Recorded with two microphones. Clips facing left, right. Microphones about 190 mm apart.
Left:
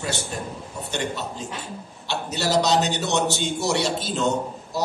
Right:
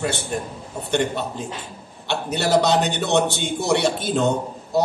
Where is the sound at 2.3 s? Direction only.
55° right (ahead or behind).